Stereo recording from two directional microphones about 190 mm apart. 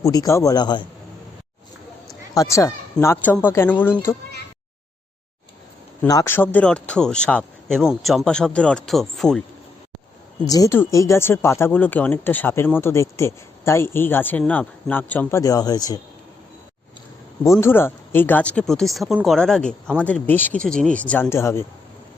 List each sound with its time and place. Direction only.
0.0 s a man's voice: 15° left (ahead or behind)
2.3 s speech: 15° left (ahead or behind)
6.1 s speech: 15° left (ahead or behind)
10.4 s speech: 20° left (ahead or behind)
17.4 s speech: 15° left (ahead or behind)